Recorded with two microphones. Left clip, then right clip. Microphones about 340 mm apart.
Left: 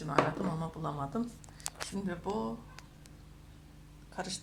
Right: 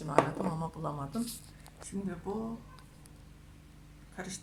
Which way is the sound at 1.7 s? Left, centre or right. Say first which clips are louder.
Left 12 dB; left.